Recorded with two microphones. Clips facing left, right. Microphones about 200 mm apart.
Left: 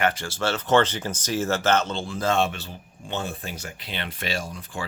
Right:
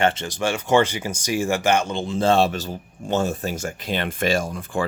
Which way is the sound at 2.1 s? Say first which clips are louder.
Right 6 dB; 30° right (ahead or behind).